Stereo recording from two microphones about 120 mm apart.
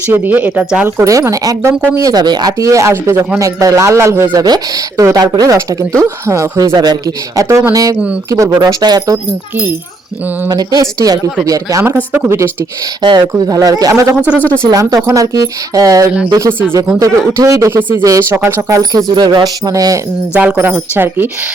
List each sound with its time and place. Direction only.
0.1 s speech: 15° right (ahead or behind)
0.9 s speech: 25° right (ahead or behind)
2.0 s speech: 35° right (ahead or behind)
10.5 s speech: 35° right (ahead or behind)
13.0 s speech: 40° right (ahead or behind)
14.2 s speech: 10° right (ahead or behind)
14.7 s speech: 30° right (ahead or behind)
16.5 s speech: 10° left (ahead or behind)
17.0 s speech: 30° right (ahead or behind)
17.7 s speech: 15° right (ahead or behind)
18.0 s speech: 25° right (ahead or behind)
18.8 s speech: 30° right (ahead or behind)
20.3 s speech: 15° right (ahead or behind)